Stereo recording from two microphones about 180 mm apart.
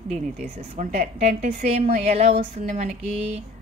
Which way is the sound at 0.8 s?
50° right (ahead or behind).